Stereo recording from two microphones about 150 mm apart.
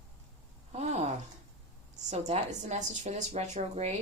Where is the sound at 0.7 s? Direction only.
45° right (ahead or behind).